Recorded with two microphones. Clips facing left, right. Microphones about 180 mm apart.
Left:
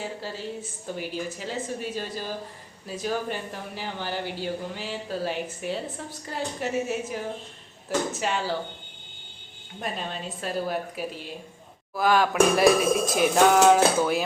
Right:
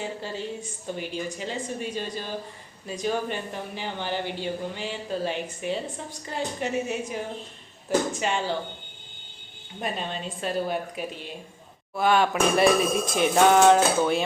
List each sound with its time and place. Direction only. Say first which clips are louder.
0.0 s speech: right 1 dB; 5° left (ahead or behind)
9.8 s speech: right 1 dB; centre (ahead or behind)